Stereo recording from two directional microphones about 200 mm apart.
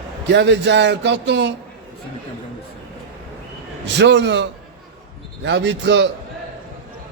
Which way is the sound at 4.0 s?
60° right (ahead or behind).